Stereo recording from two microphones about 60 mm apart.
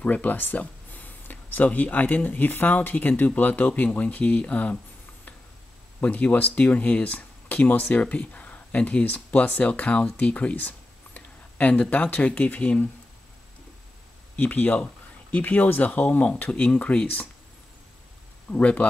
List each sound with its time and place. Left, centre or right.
0.0 s speech: left
5.9 s speech: left
14.3 s speech: left
18.5 s speech: left